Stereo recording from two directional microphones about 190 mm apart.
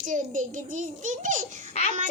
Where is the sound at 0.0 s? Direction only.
45° right (ahead or behind).